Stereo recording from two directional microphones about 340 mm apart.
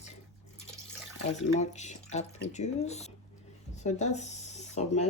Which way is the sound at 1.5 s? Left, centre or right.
Left.